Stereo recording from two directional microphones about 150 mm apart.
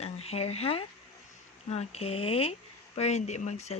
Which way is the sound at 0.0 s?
45° left (ahead or behind).